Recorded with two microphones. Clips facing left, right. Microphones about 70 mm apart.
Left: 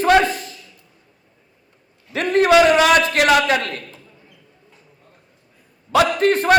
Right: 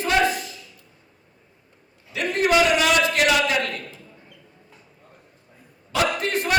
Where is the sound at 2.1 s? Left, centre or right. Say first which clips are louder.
Left 6 dB; left.